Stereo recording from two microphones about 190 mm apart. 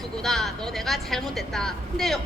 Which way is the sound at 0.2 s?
Centre (ahead or behind).